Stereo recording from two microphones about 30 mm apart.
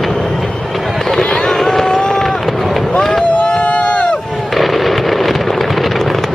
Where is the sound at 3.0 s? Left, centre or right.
Centre.